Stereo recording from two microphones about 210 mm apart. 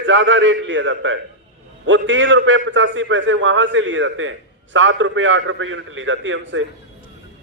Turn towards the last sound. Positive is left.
turn(degrees=-65)  # may be behind; listen again after turning